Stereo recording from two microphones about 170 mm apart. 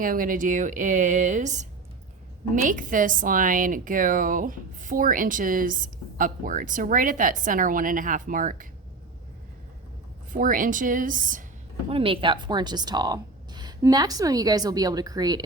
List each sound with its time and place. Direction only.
0.0 s a woman's voice: 55° right (ahead or behind)
2.6 s a woman's voice: 50° right (ahead or behind)
10.3 s a woman's voice: 50° right (ahead or behind)
11.9 s a woman's voice: 30° right (ahead or behind)